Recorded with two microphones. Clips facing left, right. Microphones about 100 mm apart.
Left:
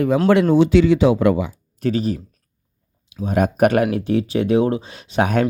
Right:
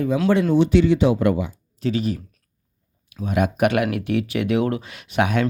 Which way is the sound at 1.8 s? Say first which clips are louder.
Left 3 dB; 50° left (ahead or behind).